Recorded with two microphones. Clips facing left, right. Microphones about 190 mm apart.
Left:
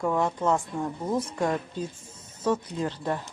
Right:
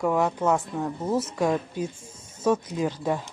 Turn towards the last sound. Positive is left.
turn(degrees=-10)  # may be behind; listen again after turning